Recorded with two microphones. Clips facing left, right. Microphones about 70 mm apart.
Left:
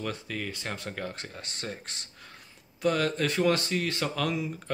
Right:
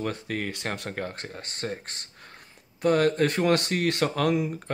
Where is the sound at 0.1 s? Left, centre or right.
Right.